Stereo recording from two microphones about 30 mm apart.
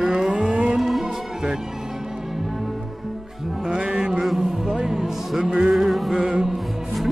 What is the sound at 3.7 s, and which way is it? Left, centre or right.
Music, right.